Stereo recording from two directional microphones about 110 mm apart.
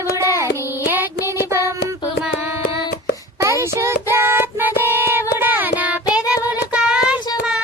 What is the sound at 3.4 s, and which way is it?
Child singing, 25° right (ahead or behind).